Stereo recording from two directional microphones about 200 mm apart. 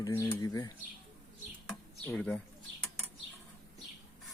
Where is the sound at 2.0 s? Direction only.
5° left (ahead or behind).